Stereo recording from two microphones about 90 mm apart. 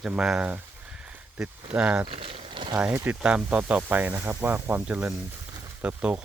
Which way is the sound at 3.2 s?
10° right (ahead or behind).